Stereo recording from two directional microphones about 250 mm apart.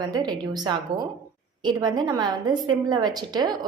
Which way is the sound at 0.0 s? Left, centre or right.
Centre.